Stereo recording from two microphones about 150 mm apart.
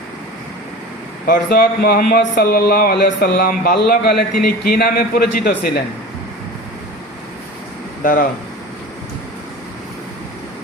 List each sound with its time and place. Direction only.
1.3 s speech: 90° left
8.0 s speech: 70° left (ahead or behind)